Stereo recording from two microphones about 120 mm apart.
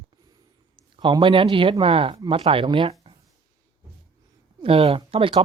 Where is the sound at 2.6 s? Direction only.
40° right (ahead or behind).